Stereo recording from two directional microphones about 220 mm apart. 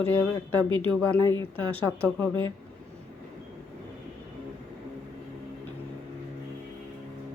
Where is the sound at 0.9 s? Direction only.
5° left (ahead or behind).